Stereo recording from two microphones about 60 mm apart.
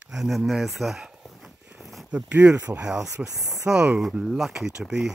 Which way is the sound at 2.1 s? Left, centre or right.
Right.